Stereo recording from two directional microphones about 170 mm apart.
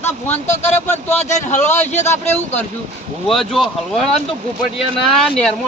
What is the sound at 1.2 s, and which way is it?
Speech, 45° left (ahead or behind).